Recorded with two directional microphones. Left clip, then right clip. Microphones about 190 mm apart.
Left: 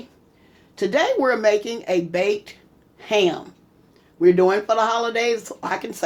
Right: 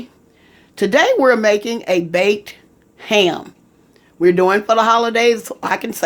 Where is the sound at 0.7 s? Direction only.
50° right (ahead or behind).